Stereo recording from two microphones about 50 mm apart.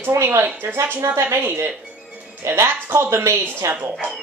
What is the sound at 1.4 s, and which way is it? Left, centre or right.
Speech, right.